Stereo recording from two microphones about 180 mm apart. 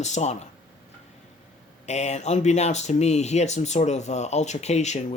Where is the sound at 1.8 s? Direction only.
40° left (ahead or behind).